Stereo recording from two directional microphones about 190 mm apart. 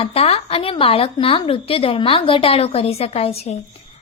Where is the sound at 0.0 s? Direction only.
30° left (ahead or behind).